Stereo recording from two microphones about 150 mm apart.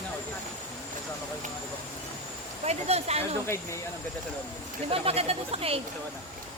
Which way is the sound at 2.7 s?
45° right (ahead or behind).